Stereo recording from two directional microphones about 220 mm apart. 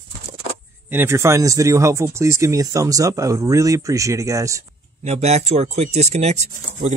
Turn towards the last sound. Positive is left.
turn(degrees=-35)  # may be behind; listen again after turning